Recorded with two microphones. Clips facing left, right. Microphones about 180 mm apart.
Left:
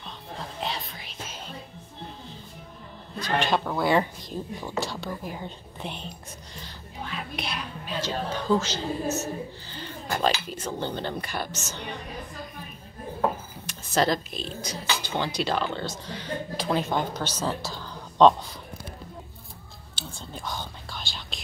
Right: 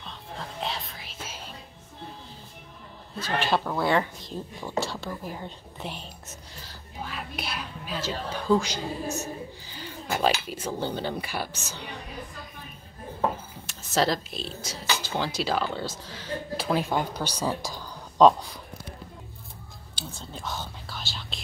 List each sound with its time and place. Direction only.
0.6 s whispering: centre (ahead or behind)
3.2 s speech: 5° right (ahead or behind)
13.7 s speech: centre (ahead or behind)
20.2 s whispering: 5° right (ahead or behind)